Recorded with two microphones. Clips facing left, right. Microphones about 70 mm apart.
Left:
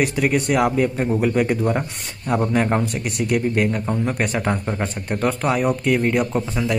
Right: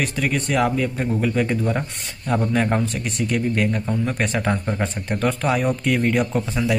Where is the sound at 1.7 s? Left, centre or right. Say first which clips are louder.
Left 2 dB; centre.